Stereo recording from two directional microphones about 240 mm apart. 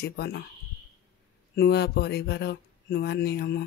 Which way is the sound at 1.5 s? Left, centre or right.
Left.